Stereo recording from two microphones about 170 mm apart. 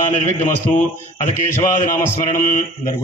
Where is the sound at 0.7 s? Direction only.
50° left (ahead or behind).